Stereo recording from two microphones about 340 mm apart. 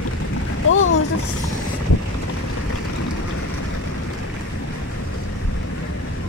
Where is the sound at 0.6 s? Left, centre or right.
Left.